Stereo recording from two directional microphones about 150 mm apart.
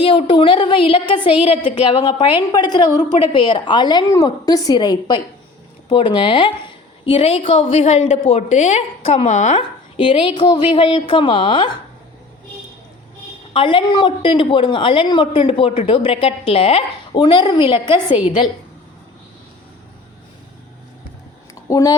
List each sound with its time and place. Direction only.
0.0 s a woman's voice: 35° left (ahead or behind)
9.6 s speech: 35° left (ahead or behind)
13.5 s speech: 35° left (ahead or behind)
21.7 s a woman's voice: 20° left (ahead or behind)